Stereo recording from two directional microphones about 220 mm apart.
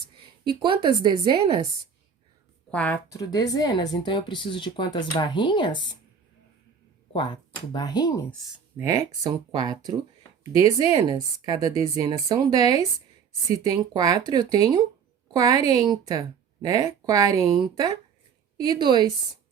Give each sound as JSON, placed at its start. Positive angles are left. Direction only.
{"t": 0.4, "sound": "a woman's voice", "side_deg": -20}
{"t": 2.6, "sound": "speech", "side_deg": 5}
{"t": 7.1, "sound": "speech", "side_deg": 20}
{"t": 8.5, "sound": "speech", "side_deg": -15}
{"t": 10.9, "sound": "a woman's voice", "side_deg": -20}